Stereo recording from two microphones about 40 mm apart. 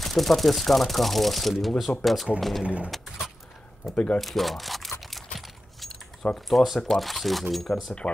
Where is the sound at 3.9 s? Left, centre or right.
Left.